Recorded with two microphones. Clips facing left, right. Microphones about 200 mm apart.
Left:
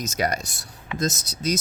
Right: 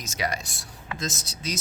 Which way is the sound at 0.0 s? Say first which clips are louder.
Left 5 dB; 45° left (ahead or behind).